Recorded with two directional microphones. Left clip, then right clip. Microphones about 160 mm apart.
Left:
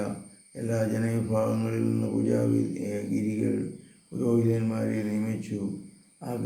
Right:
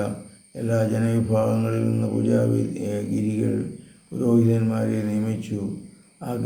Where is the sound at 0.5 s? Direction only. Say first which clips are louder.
Right 5 dB; 15° right (ahead or behind).